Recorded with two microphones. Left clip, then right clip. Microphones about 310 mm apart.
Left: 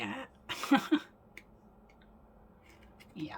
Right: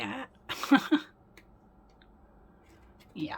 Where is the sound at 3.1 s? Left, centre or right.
Centre.